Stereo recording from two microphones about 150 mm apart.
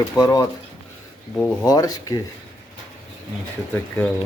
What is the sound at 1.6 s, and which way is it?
Speech, 25° left (ahead or behind).